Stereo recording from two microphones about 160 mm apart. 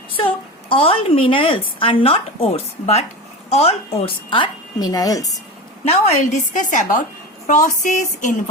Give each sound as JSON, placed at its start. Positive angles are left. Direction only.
{"t": 0.2, "sound": "a woman's voice", "side_deg": 35}
{"t": 5.8, "sound": "a woman's voice", "side_deg": 40}
{"t": 6.5, "sound": "a woman's voice", "side_deg": 55}